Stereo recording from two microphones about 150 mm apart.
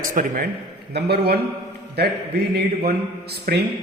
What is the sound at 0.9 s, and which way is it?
A man's voice, 90° right.